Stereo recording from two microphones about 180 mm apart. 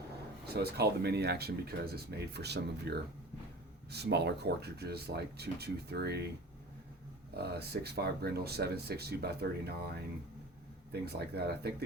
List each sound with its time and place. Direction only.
0.4 s speech: 65° right (ahead or behind)
7.5 s speech: 65° right (ahead or behind)
11.0 s speech: 65° right (ahead or behind)